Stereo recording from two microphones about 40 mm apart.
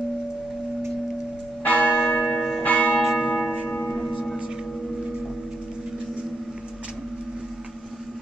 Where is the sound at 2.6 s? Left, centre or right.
Left.